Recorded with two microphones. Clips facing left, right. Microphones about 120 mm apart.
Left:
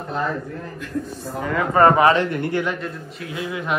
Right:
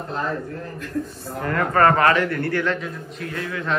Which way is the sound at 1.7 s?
15° left (ahead or behind).